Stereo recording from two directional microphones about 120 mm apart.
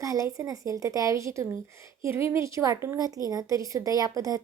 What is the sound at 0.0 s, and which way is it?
A woman's voice, 30° right (ahead or behind).